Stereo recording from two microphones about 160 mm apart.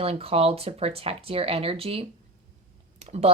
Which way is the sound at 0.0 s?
35° right (ahead or behind).